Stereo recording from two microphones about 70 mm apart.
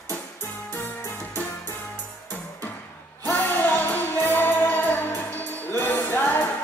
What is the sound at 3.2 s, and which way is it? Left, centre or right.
Music, left.